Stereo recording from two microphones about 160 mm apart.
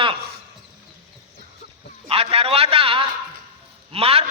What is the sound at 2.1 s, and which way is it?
A man's voice, 40° right (ahead or behind).